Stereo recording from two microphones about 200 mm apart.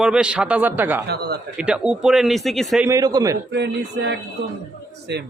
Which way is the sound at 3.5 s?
60° right (ahead or behind).